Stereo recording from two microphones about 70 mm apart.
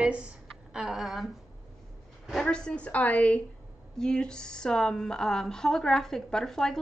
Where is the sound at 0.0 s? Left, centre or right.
Centre.